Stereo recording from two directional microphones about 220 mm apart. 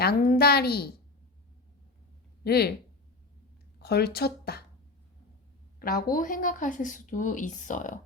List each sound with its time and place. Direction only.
0.0 s a woman's voice: 45° left (ahead or behind)
2.4 s speech: 45° left (ahead or behind)
3.8 s speech: 45° left (ahead or behind)
5.8 s a woman's voice: 40° left (ahead or behind)